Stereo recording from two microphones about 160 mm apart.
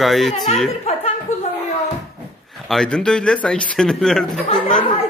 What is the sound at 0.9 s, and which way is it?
Chuckle, 45° left (ahead or behind).